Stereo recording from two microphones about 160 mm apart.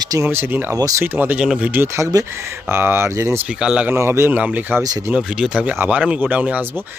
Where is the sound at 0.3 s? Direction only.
15° right (ahead or behind).